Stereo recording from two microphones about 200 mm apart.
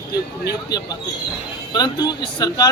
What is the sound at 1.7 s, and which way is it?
Speech, 20° left (ahead or behind).